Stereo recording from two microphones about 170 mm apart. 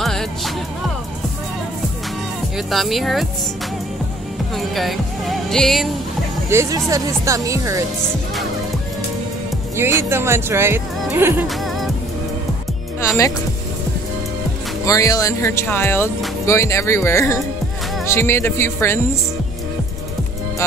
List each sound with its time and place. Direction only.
0.0 s music: centre (ahead or behind)
2.5 s speech: centre (ahead or behind)
4.6 s speech: centre (ahead or behind)
6.5 s speech: 20° right (ahead or behind)
9.8 s speech: 15° right (ahead or behind)
11.4 s music: centre (ahead or behind)
14.9 s speech: 20° left (ahead or behind)